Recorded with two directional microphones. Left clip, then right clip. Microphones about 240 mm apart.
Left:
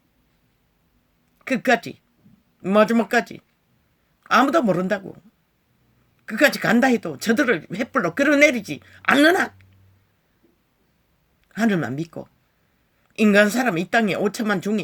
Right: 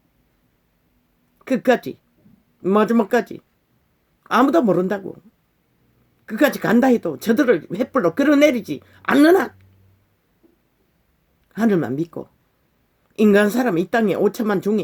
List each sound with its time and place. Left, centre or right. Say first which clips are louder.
1.5 s a man's voice: right 2 dB; left
6.2 s speech: even; left
11.5 s speech: right 3 dB; left
13.1 s speech: right 1 dB; left